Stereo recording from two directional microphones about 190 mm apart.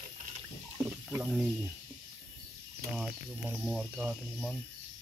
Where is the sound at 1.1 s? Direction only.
Centre (ahead or behind).